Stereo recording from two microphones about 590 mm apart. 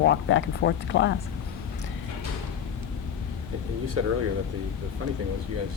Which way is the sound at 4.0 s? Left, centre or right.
Right.